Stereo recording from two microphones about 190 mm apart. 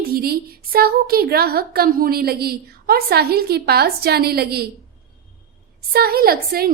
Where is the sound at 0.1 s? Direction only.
50° right (ahead or behind).